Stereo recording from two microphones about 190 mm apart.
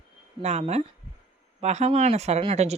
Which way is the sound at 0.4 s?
35° right (ahead or behind).